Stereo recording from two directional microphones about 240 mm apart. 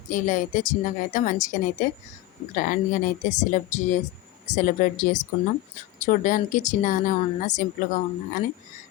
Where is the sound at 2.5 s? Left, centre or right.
Left.